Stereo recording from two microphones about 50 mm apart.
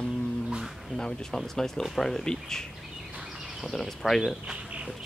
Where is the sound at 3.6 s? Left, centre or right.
Centre.